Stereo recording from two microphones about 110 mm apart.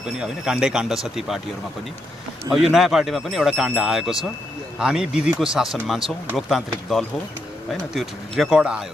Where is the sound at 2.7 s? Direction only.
Centre (ahead or behind).